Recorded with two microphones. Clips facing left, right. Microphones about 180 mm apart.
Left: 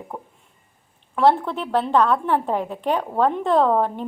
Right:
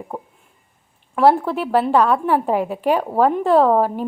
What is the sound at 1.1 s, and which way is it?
A woman's voice, 5° right (ahead or behind).